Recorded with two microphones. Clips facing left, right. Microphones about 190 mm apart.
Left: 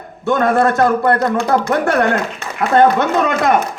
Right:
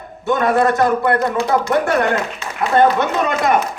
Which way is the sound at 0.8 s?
50° left (ahead or behind).